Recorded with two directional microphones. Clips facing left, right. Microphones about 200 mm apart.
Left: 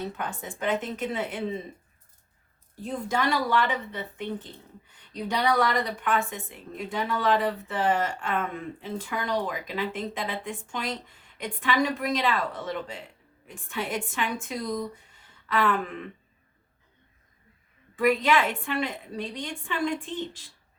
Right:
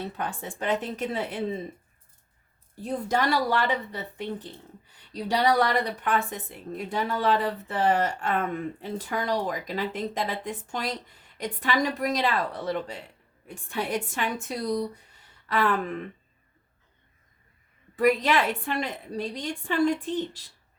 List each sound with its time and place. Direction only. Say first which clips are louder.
0.2 s speech: right 1 dB; 35° right (ahead or behind)
2.8 s speech: right 2 dB; 40° right (ahead or behind)
17.9 s speech: even; 40° right (ahead or behind)